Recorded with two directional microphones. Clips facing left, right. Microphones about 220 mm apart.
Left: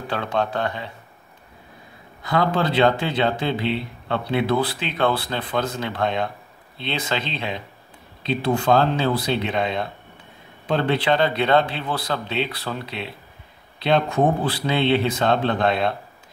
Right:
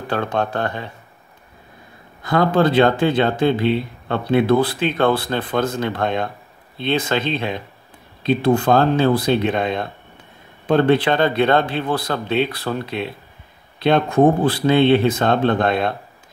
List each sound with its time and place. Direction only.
0.1 s speech: 50° right (ahead or behind)
2.2 s speech: 50° right (ahead or behind)